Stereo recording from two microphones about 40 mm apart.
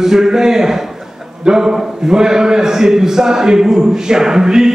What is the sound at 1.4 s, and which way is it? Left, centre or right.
Speech, centre.